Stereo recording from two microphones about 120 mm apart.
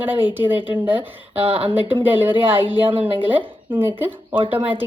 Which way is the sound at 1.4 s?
50° right (ahead or behind).